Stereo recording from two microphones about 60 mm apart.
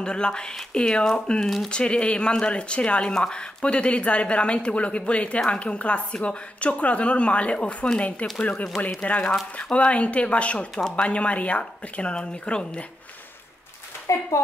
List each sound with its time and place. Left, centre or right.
0.0 s speech: centre
14.3 s speech: left